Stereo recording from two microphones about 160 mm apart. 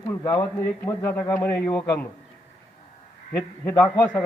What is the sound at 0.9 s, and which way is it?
A man's voice, 15° left (ahead or behind).